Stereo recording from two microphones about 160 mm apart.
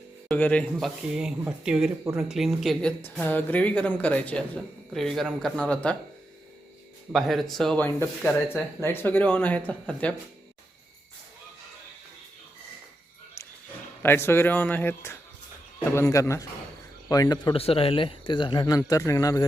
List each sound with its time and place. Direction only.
0.3 s speech: 10° left (ahead or behind)
1.1 s speech: 5° right (ahead or behind)
3.0 s speech: 10° left (ahead or behind)
7.1 s speech: centre (ahead or behind)
14.0 s speech: 15° left (ahead or behind)